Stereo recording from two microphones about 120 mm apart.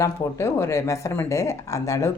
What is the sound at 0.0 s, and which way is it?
Speech, 20° left (ahead or behind).